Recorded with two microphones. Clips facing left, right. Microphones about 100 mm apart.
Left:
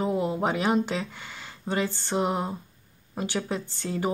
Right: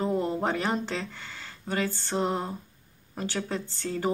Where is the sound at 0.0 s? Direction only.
10° left (ahead or behind).